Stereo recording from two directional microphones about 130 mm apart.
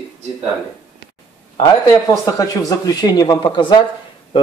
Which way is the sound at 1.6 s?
25° left (ahead or behind).